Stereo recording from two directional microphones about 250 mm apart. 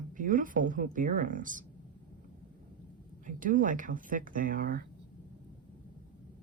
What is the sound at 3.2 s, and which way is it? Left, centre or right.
Speech, right.